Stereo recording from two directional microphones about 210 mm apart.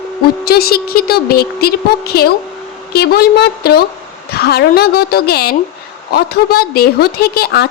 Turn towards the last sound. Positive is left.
turn(degrees=50)  # may be behind; listen again after turning